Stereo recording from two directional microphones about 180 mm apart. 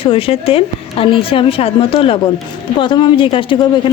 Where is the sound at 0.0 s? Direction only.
30° left (ahead or behind).